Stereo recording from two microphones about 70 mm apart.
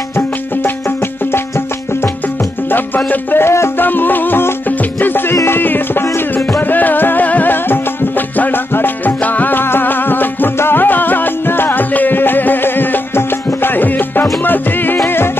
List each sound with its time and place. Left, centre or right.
3.1 s music: left